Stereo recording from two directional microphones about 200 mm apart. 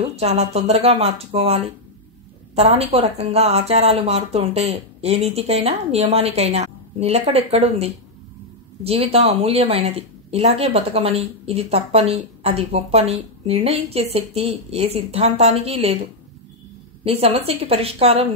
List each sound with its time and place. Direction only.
0.1 s a woman's voice: 30° right (ahead or behind)